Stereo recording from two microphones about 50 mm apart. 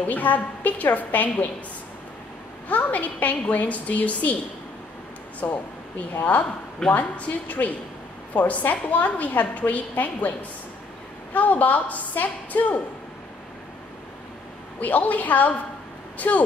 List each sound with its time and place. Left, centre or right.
0.0 s a woman's voice: left
2.7 s a woman's voice: left
5.4 s speech: left
6.9 s a woman's voice: left
11.3 s a woman's voice: left
14.8 s a woman's voice: left